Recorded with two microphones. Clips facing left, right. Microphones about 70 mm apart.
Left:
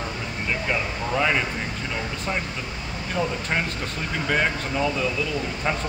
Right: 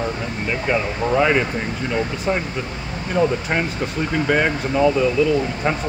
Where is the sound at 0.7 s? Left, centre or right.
Centre.